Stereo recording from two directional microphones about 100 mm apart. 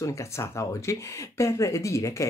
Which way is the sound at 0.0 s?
30° left (ahead or behind).